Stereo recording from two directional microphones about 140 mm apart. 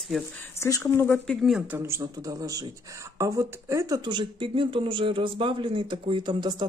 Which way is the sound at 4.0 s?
35° right (ahead or behind).